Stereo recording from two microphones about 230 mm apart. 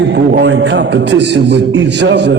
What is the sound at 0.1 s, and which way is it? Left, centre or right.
A man's voice, right.